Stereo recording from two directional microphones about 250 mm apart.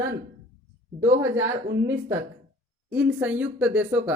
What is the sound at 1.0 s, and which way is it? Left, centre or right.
Speech, centre.